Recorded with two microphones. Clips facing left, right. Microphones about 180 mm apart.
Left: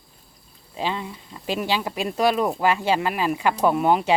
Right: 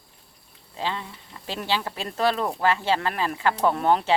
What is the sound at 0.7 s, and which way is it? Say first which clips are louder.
Speech: left 3 dB; 15° left (ahead or behind).